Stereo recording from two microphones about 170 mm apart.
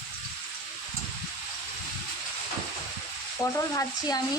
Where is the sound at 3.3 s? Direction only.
20° left (ahead or behind).